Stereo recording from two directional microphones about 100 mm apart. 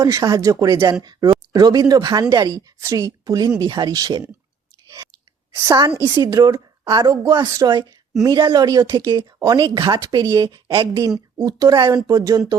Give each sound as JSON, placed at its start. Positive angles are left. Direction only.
{"t": 0.0, "sound": "speech", "side_deg": -35}
{"t": 4.9, "sound": "chewing", "side_deg": -40}
{"t": 5.6, "sound": "speech", "side_deg": -40}
{"t": 6.8, "sound": "speech", "side_deg": -50}
{"t": 7.5, "sound": "speech", "side_deg": -40}
{"t": 8.2, "sound": "speech", "side_deg": -35}
{"t": 10.7, "sound": "speech", "side_deg": -55}
{"t": 11.4, "sound": "speech", "side_deg": -40}